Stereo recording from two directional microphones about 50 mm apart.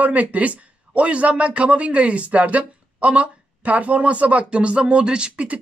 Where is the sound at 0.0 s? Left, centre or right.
Right.